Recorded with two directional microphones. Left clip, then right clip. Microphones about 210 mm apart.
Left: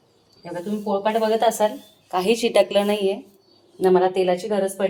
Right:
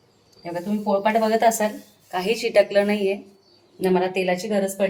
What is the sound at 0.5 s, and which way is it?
A woman's voice, 10° left (ahead or behind).